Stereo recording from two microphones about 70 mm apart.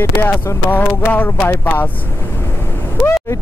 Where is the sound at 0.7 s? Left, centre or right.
Left.